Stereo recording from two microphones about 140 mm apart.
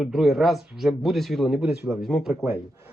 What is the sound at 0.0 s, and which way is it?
A man's voice, centre (ahead or behind).